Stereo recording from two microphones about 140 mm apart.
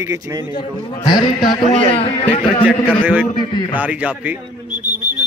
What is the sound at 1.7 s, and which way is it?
Speech, 45° left (ahead or behind).